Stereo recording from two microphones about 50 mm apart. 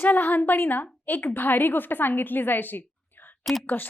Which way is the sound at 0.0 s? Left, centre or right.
Left.